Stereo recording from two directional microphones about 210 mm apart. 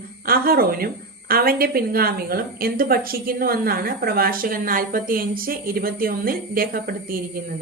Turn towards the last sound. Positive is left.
turn(degrees=-45)  # may be behind; listen again after turning